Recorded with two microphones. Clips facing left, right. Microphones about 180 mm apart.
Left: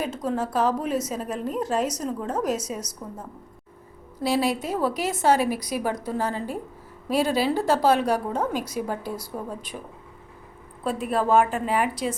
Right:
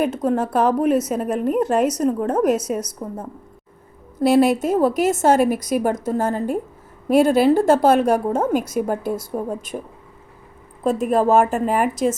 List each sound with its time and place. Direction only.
0.0 s a woman's voice: 55° right (ahead or behind)
10.8 s a woman's voice: 45° right (ahead or behind)